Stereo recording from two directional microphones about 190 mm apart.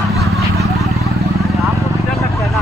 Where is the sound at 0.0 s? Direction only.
Centre (ahead or behind).